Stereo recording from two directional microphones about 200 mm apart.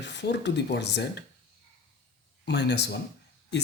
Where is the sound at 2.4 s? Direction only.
55° left (ahead or behind).